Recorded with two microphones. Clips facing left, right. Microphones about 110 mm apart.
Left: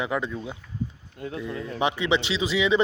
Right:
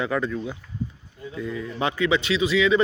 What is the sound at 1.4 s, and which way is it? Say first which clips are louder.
Speech: even; 20° left (ahead or behind).